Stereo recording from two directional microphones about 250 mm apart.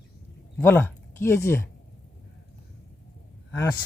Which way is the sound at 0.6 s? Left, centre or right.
Centre.